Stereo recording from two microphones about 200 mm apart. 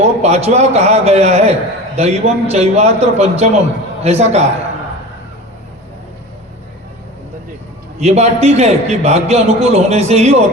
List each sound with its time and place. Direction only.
0.0 s a man's voice: 35° right (ahead or behind)
7.9 s a man's voice: 30° right (ahead or behind)